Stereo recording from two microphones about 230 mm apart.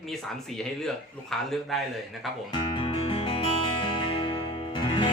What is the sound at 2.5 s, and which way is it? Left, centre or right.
Music, left.